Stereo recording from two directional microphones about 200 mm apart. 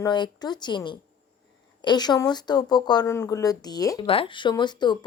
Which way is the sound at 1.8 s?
20° left (ahead or behind).